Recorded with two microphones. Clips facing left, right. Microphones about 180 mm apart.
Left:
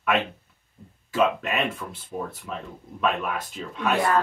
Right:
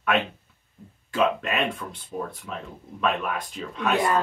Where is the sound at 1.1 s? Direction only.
Centre (ahead or behind).